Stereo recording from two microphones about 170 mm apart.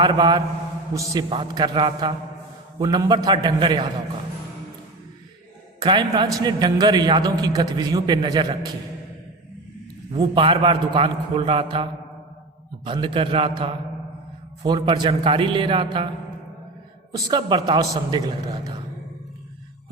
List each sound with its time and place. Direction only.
0.0 s a man's voice: 25° right (ahead or behind)
5.8 s a man's voice: 25° right (ahead or behind)
10.2 s a man's voice: 30° right (ahead or behind)
17.1 s a man's voice: 25° right (ahead or behind)